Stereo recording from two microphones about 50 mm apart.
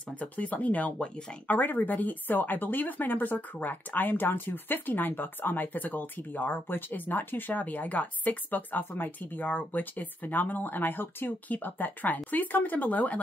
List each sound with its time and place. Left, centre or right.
0.2 s speech: left
0.9 s speech: centre
1.5 s speech: left